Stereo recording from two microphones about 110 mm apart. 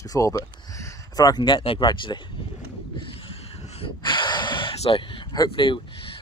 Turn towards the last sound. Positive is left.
turn(degrees=45)  # may be behind; listen again after turning